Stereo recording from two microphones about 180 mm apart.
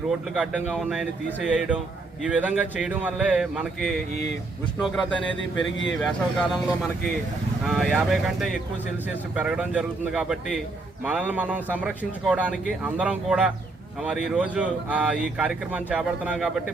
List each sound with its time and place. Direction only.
0.7 s a man's voice: centre (ahead or behind)
5.4 s speech: 90° left
6.0 s a man's voice: centre (ahead or behind)